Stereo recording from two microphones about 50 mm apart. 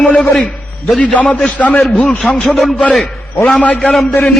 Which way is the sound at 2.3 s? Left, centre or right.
Centre.